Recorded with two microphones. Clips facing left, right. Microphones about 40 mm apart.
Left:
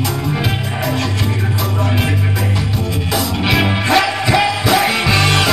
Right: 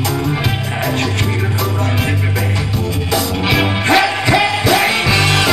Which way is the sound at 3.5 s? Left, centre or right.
Centre.